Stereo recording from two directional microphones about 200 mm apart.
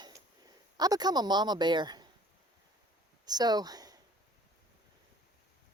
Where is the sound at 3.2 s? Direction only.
20° right (ahead or behind).